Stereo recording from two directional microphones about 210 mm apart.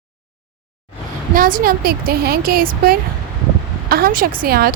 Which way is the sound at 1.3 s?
40° right (ahead or behind).